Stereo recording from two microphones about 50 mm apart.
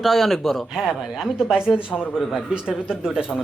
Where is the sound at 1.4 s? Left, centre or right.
Centre.